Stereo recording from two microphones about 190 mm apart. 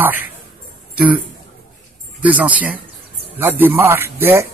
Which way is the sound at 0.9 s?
10° right (ahead or behind).